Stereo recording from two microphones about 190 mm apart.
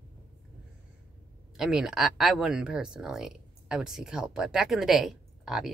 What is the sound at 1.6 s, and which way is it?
Speech, centre (ahead or behind).